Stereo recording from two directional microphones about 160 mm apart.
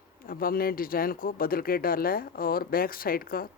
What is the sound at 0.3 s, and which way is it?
Speech, 65° left (ahead or behind).